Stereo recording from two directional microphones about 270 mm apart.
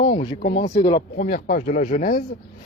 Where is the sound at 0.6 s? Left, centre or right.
Centre.